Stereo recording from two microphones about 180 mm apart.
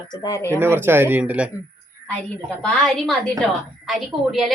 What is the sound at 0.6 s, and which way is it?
Speech, 15° right (ahead or behind).